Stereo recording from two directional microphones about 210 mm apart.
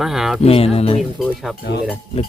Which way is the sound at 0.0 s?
Centre (ahead or behind).